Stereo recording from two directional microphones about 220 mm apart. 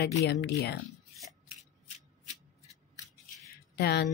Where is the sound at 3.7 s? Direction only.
50° left (ahead or behind).